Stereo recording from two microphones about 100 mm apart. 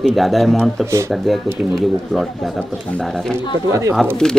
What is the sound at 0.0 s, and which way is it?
Speech, centre (ahead or behind).